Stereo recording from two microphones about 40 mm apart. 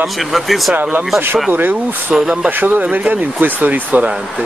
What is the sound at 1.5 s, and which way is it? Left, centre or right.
Speech, right.